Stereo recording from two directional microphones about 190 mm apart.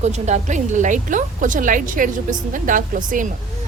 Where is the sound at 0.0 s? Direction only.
35° right (ahead or behind).